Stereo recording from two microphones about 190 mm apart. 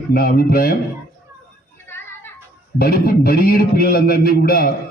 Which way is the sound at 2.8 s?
55° left (ahead or behind).